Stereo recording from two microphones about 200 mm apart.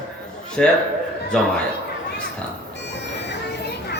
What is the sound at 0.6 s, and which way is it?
Speech, 5° left (ahead or behind).